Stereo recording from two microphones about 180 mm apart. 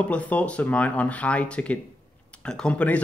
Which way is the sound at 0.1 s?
10° left (ahead or behind).